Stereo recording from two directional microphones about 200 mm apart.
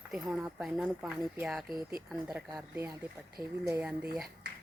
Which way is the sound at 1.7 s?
20° left (ahead or behind).